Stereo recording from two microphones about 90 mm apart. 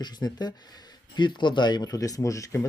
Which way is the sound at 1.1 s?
60° left (ahead or behind).